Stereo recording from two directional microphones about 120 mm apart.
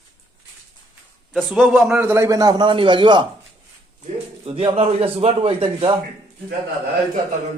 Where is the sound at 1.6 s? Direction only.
10° right (ahead or behind).